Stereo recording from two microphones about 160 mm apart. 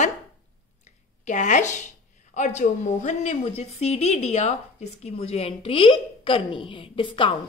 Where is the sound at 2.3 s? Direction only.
50° left (ahead or behind).